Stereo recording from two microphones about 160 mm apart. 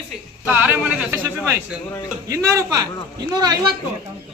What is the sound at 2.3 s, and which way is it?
Speech, 20° right (ahead or behind).